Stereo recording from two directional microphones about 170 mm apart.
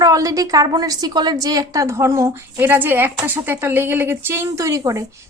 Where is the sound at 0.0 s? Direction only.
20° right (ahead or behind).